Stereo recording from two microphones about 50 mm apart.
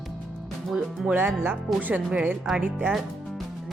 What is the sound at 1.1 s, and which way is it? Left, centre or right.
Speech, right.